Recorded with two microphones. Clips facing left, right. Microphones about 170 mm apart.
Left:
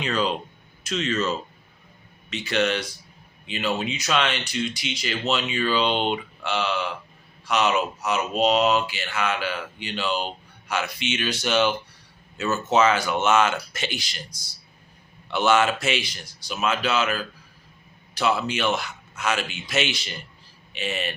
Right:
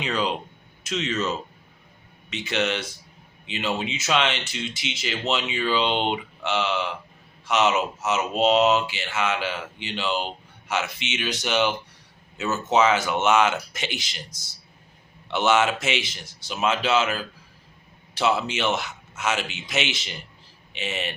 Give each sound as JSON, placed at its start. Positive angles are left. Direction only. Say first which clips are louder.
{"t": 0.0, "sound": "speech", "louder": "left 1 dB", "side_deg": -15}